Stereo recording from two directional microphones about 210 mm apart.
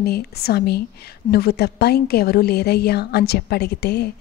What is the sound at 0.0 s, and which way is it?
Speech, 50° left (ahead or behind).